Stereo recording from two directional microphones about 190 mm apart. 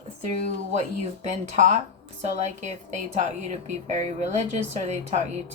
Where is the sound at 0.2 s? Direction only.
35° right (ahead or behind).